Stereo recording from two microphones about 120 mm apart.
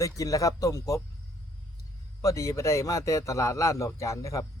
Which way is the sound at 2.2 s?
25° left (ahead or behind).